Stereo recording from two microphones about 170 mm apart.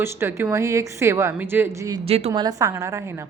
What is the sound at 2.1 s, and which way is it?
Speech, 40° right (ahead or behind).